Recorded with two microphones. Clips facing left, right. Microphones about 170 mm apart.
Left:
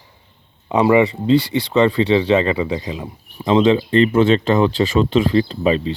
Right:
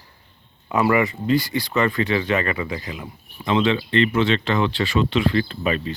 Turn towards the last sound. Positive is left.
turn(degrees=25)  # may be behind; listen again after turning